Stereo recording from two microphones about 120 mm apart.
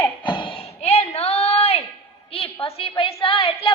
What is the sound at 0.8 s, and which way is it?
A woman's voice, 60° left (ahead or behind).